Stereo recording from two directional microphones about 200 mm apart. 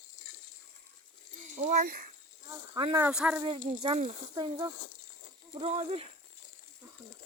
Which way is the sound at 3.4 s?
25° right (ahead or behind).